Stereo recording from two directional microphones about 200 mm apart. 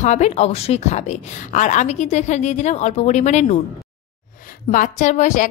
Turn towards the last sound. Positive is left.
turn(degrees=35)  # may be behind; listen again after turning